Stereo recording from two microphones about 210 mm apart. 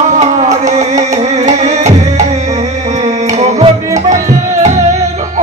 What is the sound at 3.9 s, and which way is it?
Music, 15° right (ahead or behind).